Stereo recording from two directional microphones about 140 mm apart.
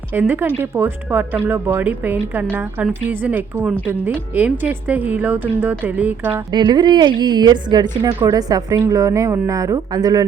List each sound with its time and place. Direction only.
0.1 s speech: 15° right (ahead or behind)
6.5 s a woman's voice: 30° right (ahead or behind)